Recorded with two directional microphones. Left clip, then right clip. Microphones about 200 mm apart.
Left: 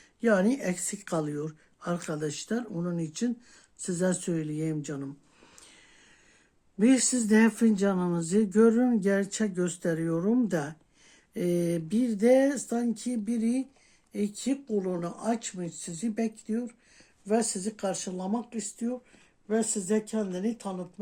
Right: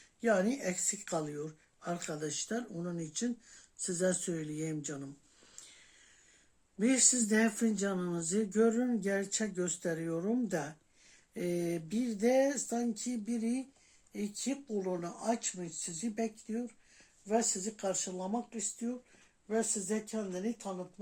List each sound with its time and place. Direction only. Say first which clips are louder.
0.2 s speech: left 5 dB; 45° left (ahead or behind)
6.7 s speech: left 5 dB; 45° left (ahead or behind)